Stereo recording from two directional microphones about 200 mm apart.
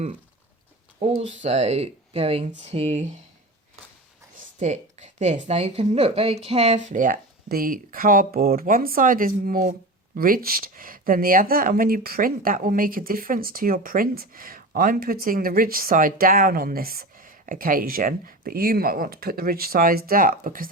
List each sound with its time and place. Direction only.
0.9 s speech: 30° right (ahead or behind)
4.6 s speech: 35° right (ahead or behind)